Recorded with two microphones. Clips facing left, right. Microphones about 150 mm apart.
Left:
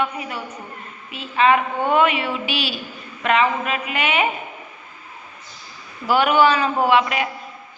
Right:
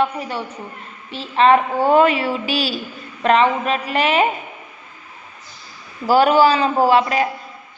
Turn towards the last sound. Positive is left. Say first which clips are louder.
# right 3 dB
turn(degrees=-35)  # may be behind; listen again after turning